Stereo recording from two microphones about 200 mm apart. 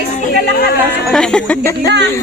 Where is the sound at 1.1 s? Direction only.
5° left (ahead or behind).